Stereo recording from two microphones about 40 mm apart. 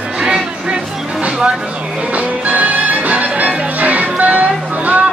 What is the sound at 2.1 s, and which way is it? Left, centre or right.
Music, right.